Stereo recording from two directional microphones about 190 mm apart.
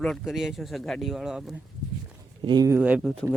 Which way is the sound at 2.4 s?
20° right (ahead or behind).